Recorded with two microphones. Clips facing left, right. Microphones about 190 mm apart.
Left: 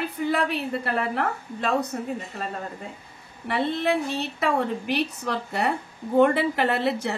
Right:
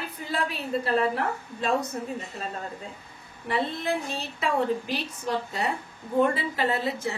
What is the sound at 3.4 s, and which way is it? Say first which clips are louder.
A woman's voice: left 4 dB; 65° left (ahead or behind).